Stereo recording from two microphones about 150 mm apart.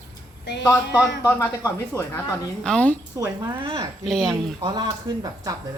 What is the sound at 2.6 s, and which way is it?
Speech, 10° left (ahead or behind).